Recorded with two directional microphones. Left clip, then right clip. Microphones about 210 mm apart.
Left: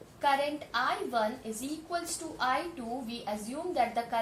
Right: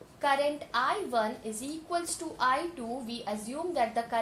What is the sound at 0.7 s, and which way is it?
A woman's voice, 45° right (ahead or behind).